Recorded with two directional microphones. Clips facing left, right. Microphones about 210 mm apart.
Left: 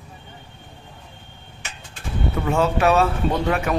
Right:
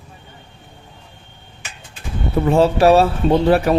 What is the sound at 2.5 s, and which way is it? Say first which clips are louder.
Speech: right 6 dB; 35° right (ahead or behind).